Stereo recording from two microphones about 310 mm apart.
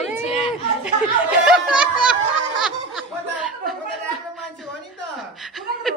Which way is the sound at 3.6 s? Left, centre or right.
Centre.